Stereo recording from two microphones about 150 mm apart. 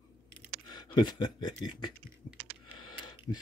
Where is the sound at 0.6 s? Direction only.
30° left (ahead or behind).